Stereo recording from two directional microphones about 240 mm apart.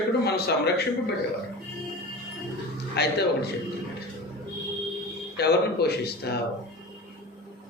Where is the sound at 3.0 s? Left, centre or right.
Left.